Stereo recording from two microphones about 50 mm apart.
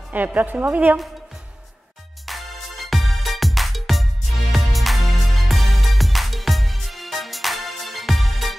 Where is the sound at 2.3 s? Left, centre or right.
Centre.